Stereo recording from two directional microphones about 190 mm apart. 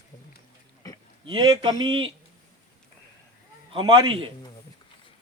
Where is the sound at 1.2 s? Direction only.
25° right (ahead or behind).